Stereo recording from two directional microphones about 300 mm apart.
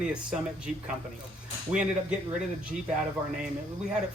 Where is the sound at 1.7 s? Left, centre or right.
Centre.